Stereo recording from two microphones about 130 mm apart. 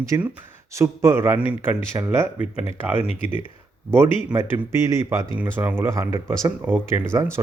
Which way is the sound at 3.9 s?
20° right (ahead or behind).